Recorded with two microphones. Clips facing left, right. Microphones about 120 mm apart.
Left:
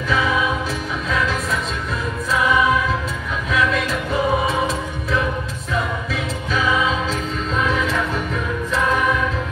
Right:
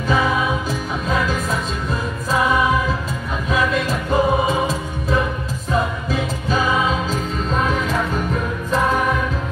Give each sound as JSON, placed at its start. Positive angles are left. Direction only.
{"t": 4.1, "sound": "music", "side_deg": -40}
{"t": 6.5, "sound": "music", "side_deg": -40}